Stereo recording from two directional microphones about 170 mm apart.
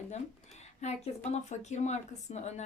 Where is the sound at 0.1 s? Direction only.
40° left (ahead or behind).